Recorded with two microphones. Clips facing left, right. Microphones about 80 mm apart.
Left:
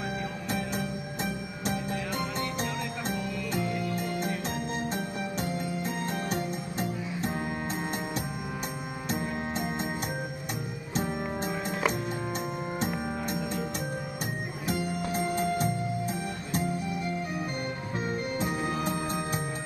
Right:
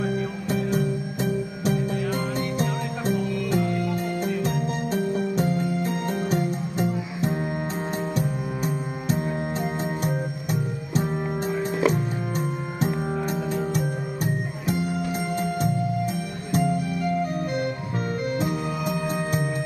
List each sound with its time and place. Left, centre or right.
3.5 s music: centre
15.6 s music: right